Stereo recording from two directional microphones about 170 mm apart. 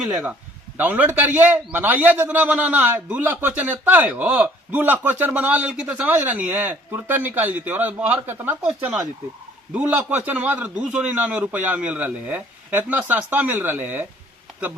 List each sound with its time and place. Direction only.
0.0 s a man's voice: 5° right (ahead or behind)